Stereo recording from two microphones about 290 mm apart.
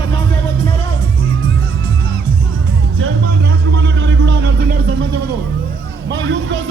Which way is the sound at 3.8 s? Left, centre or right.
Right.